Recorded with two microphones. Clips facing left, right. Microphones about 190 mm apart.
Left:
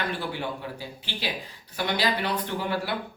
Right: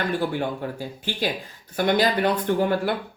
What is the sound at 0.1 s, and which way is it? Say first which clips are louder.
Speech: right 6 dB; 45° right (ahead or behind).